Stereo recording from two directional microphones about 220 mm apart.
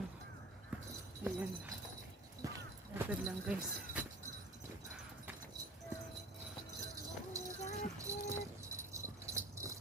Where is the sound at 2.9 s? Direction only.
5° right (ahead or behind).